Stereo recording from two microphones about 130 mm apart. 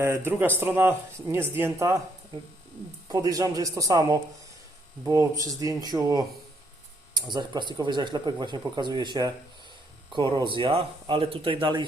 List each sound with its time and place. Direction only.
0.0 s speech: 20° right (ahead or behind)
3.1 s speech: 25° right (ahead or behind)